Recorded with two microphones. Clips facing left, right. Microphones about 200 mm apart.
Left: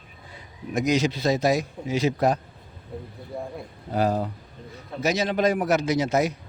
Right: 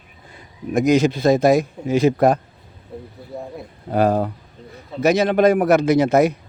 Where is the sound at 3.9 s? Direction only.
60° right (ahead or behind).